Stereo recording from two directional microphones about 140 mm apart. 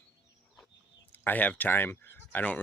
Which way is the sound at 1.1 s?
15° left (ahead or behind).